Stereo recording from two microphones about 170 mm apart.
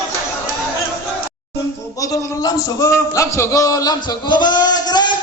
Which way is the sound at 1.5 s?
20° left (ahead or behind).